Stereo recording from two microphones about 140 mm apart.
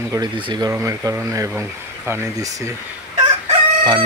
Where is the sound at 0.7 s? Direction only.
20° right (ahead or behind).